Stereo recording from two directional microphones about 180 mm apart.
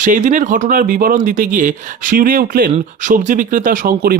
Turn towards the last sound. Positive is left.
turn(degrees=-55)  # may be behind; listen again after turning